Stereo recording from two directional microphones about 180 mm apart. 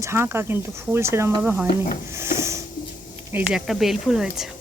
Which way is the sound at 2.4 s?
15° right (ahead or behind).